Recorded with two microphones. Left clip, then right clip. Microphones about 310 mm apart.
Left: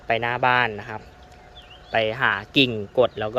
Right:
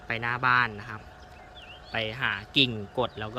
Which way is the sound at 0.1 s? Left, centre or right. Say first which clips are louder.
Left 5 dB; centre.